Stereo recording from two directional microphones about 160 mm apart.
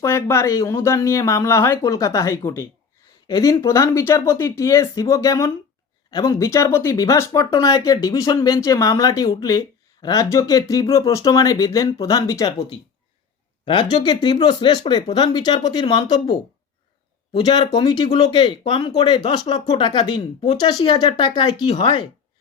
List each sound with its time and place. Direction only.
0.0 s speech: 15° left (ahead or behind)
13.7 s speech: 30° left (ahead or behind)
17.3 s speech: 25° left (ahead or behind)
19.3 s speech: 35° left (ahead or behind)